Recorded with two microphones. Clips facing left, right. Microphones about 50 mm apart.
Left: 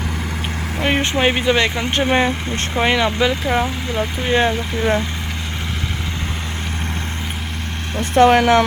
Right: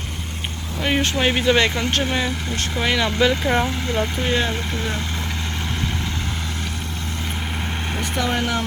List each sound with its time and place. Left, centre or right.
0.9 s speech: centre
2.0 s speech: left
2.7 s speech: centre
4.4 s speech: left
8.1 s speech: left